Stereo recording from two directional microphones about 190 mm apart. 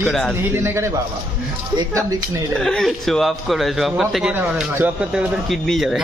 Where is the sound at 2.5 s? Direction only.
5° left (ahead or behind).